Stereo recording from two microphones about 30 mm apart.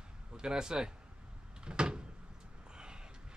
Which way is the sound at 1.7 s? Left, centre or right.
Right.